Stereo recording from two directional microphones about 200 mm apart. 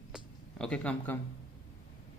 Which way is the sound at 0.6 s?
5° left (ahead or behind).